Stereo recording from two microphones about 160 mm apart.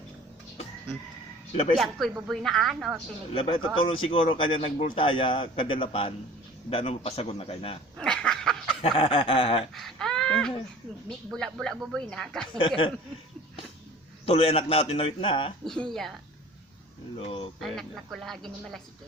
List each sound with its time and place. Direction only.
1.7 s speech: centre (ahead or behind)
3.3 s a man's voice: 35° left (ahead or behind)
7.9 s a sound: 5° left (ahead or behind)
8.8 s a man's voice: 35° left (ahead or behind)
9.7 s a sound: centre (ahead or behind)
11.3 s speech: centre (ahead or behind)
12.5 s a man's voice: 35° left (ahead or behind)
14.3 s a man's voice: 40° left (ahead or behind)
15.6 s speech: centre (ahead or behind)
17.2 s a man's voice: 35° left (ahead or behind)
17.6 s speech: centre (ahead or behind)